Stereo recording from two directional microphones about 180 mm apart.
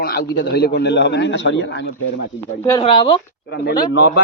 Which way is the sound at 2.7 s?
25° left (ahead or behind).